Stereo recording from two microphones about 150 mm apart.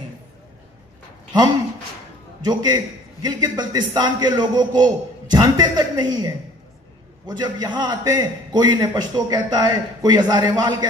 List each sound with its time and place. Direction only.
2.4 s a man's voice: 25° right (ahead or behind)